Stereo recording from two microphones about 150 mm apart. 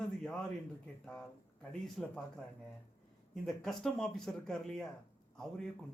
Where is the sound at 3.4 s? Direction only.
5° left (ahead or behind).